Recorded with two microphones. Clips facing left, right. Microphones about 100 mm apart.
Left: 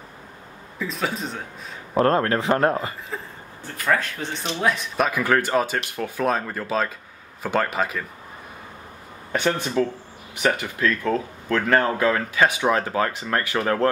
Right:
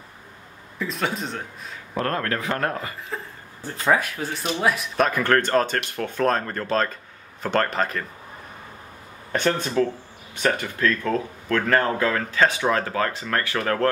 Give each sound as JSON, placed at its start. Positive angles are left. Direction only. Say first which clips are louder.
{"t": 0.7, "sound": "speech", "louder": "even", "side_deg": 0}
{"t": 2.0, "sound": "speech", "louder": "left 6 dB", "side_deg": 25}
{"t": 3.1, "sound": "speech", "louder": "even", "side_deg": 0}
{"t": 9.3, "sound": "speech", "louder": "even", "side_deg": 10}